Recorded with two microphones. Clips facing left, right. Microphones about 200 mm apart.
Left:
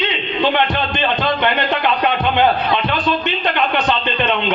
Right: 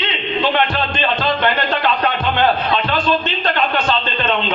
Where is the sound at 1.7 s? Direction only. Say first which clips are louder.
Left 1 dB; 15° left (ahead or behind).